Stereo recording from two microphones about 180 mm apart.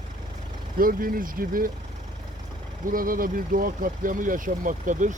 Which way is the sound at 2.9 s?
50° right (ahead or behind).